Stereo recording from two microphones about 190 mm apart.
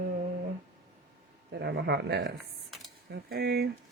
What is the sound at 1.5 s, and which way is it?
Speech, 60° right (ahead or behind).